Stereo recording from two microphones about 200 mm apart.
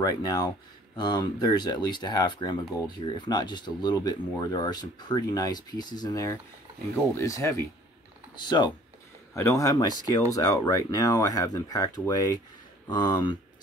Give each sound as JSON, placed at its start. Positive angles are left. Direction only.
{"t": 0.0, "sound": "speech", "side_deg": 20}